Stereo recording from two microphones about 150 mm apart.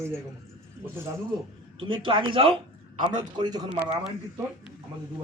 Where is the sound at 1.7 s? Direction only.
35° right (ahead or behind).